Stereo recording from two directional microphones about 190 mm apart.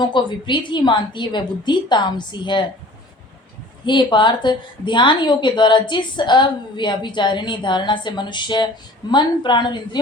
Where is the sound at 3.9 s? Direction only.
25° left (ahead or behind).